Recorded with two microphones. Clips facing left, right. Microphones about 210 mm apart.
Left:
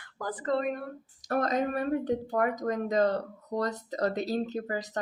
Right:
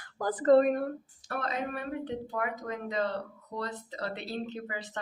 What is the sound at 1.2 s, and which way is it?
Speech, 40° left (ahead or behind).